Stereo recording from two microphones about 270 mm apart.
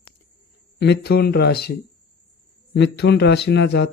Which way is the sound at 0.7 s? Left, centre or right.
Left.